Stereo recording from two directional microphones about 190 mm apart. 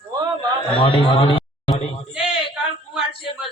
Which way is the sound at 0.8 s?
25° left (ahead or behind).